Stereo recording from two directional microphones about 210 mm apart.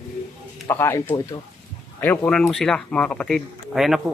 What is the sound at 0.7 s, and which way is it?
Speech, 10° left (ahead or behind).